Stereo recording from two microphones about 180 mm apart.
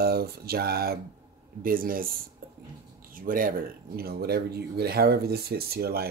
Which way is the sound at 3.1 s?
50° right (ahead or behind).